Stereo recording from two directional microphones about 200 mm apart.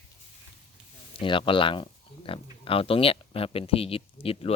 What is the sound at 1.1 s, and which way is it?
Speech, 25° left (ahead or behind).